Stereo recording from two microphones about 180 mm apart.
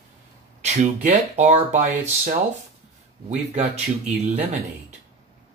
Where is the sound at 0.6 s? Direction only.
40° right (ahead or behind).